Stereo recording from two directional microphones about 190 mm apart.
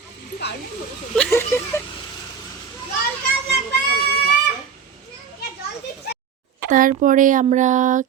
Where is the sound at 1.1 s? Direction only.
10° left (ahead or behind).